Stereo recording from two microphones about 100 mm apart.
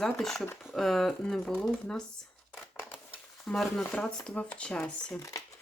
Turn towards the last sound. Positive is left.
turn(degrees=10)  # may be behind; listen again after turning